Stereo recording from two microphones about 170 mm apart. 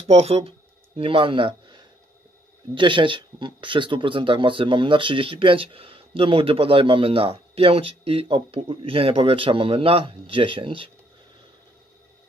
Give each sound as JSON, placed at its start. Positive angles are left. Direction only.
{"t": 0.0, "sound": "speech", "side_deg": -40}